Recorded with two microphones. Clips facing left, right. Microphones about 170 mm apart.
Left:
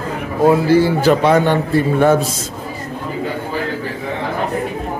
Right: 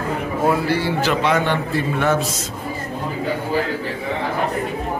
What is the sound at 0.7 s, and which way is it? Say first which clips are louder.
A man's voice: left 7 dB; 40° left (ahead or behind).